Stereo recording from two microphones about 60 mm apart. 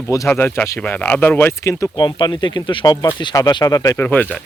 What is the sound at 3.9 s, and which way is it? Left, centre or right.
Speech, left.